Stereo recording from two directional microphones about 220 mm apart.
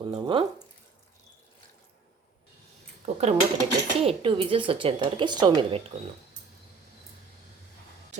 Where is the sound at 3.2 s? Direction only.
30° right (ahead or behind).